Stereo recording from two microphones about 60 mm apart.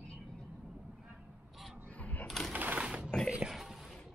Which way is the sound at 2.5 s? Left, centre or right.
Right.